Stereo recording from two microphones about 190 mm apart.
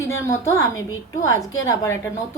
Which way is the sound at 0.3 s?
15° left (ahead or behind).